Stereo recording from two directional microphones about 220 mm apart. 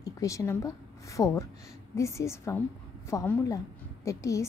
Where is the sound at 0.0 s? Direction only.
15° left (ahead or behind).